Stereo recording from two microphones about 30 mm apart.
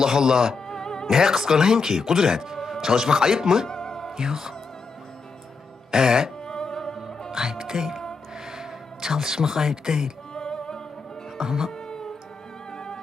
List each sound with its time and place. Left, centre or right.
0.0 s speech: centre
0.5 s music: centre
1.1 s speech: centre
3.7 s music: centre
4.2 s speech: centre
5.9 s speech: centre
6.4 s music: left
7.3 s music: centre
8.5 s speech: centre
10.3 s music: left
11.3 s speech: centre
11.9 s music: left